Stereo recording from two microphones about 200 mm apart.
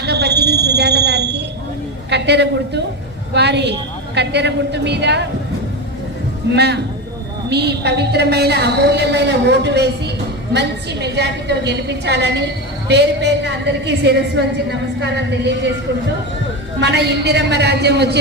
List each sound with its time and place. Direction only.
0.0 s a sound: 55° right (ahead or behind)
2.0 s a woman's voice: 60° right (ahead or behind)
6.5 s a woman's voice: 55° right (ahead or behind)
16.8 s a woman's voice: 55° right (ahead or behind)